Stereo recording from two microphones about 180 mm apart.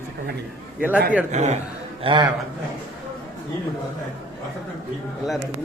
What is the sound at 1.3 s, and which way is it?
Speech, 40° right (ahead or behind).